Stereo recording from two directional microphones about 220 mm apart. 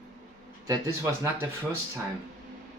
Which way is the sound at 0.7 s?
15° right (ahead or behind).